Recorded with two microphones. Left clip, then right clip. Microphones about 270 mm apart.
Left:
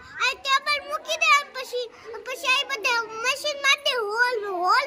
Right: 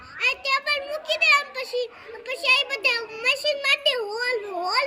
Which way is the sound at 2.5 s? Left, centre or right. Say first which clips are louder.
Right 2 dB; centre.